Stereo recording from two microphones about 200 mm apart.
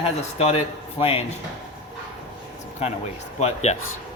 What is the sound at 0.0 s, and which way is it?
Speech, 30° left (ahead or behind).